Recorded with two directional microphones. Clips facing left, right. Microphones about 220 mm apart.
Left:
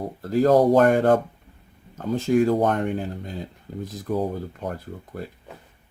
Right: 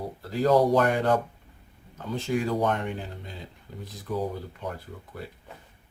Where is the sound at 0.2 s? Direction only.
45° left (ahead or behind).